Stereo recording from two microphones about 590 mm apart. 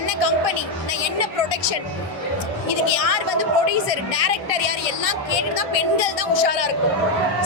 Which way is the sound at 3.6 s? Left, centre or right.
Left.